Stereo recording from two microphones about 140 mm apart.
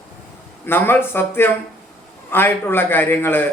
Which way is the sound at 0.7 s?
15° left (ahead or behind).